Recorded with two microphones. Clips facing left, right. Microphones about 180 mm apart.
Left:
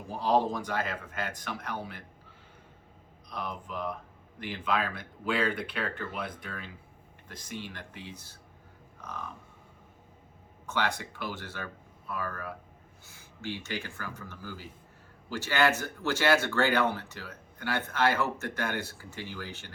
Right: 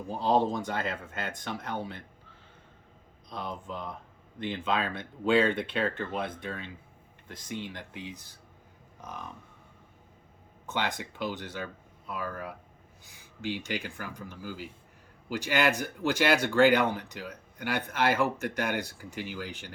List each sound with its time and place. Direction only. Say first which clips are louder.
0.2 s speech: right 1 dB; 25° right (ahead or behind)
3.2 s speech: right 1 dB; 25° right (ahead or behind)
10.7 s speech: left 1 dB; 20° right (ahead or behind)